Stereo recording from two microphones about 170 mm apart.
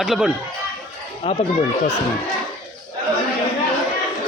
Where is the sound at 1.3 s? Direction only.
35° left (ahead or behind).